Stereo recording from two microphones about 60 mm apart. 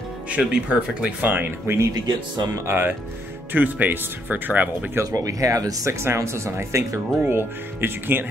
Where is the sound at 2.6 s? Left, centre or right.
Right.